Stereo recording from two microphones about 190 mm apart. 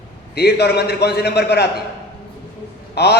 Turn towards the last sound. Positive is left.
turn(degrees=60)  # may be behind; listen again after turning